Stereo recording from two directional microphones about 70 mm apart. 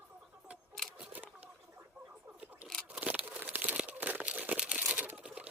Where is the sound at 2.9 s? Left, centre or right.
Right.